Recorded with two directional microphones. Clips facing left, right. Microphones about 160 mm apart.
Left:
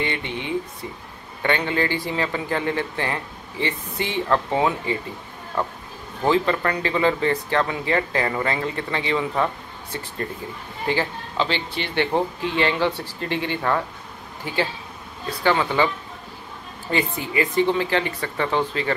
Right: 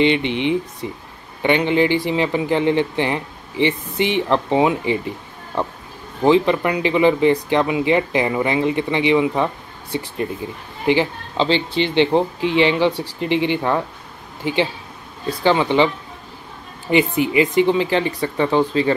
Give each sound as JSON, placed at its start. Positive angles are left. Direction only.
{"t": 0.0, "sound": "speech", "side_deg": -20}
{"t": 10.9, "sound": "speech", "side_deg": -25}
{"t": 16.9, "sound": "speech", "side_deg": -20}